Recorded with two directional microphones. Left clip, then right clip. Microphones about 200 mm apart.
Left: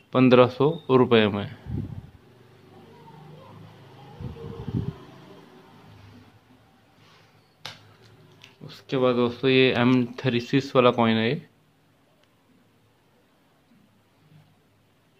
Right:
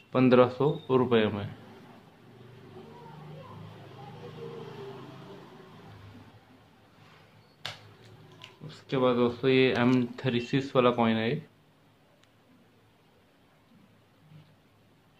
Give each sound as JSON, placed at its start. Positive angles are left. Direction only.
{"t": 0.1, "sound": "speech", "side_deg": 30}
{"t": 8.6, "sound": "speech", "side_deg": 30}